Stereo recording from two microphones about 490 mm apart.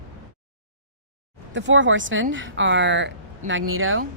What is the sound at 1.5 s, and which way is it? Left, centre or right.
Speech, right.